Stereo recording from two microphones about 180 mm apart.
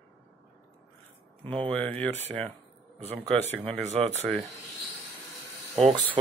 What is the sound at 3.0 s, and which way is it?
Speech, 35° right (ahead or behind).